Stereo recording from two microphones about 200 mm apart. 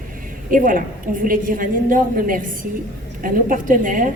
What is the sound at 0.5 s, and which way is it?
A woman's voice, 45° right (ahead or behind).